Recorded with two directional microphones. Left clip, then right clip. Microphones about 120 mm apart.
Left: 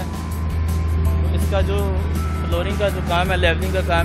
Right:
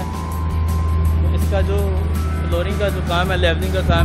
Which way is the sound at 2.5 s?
20° right (ahead or behind).